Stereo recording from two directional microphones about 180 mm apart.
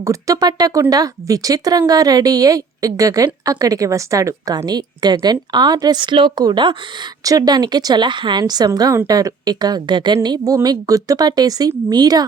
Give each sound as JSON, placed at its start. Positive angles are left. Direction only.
{"t": 0.0, "sound": "speech", "side_deg": -15}